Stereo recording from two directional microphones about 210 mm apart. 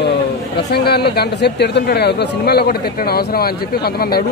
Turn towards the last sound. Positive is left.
turn(degrees=45)  # may be behind; listen again after turning